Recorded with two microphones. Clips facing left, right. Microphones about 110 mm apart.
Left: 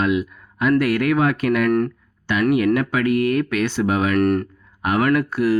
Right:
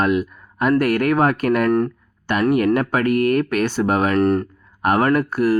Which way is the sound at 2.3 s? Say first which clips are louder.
Right 1 dB; 45° right (ahead or behind).